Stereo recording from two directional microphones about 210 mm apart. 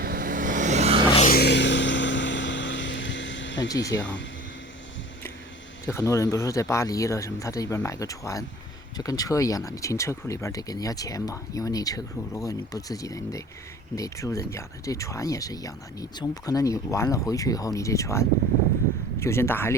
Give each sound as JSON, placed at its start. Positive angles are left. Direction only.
{"t": 0.0, "sound": "vehicle", "side_deg": -45}
{"t": 1.3, "sound": "vehicle", "side_deg": 50}
{"t": 3.7, "sound": "speech", "side_deg": 15}
{"t": 3.9, "sound": "speech", "side_deg": 60}
{"t": 5.8, "sound": "speech", "side_deg": 15}